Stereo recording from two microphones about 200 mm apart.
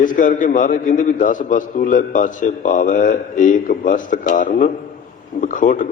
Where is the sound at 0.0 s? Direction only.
40° left (ahead or behind).